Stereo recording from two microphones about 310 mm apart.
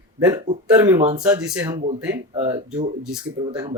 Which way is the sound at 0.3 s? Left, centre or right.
Centre.